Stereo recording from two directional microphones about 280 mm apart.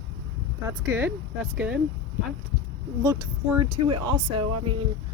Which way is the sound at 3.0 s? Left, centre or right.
Centre.